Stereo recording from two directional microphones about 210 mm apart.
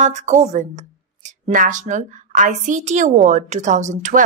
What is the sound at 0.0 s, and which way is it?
Speech, 35° right (ahead or behind).